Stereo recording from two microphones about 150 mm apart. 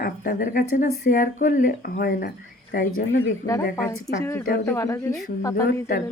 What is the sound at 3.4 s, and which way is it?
A woman's voice, 20° left (ahead or behind).